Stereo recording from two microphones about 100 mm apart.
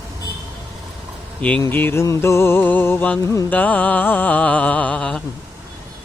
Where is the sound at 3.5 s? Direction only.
15° left (ahead or behind).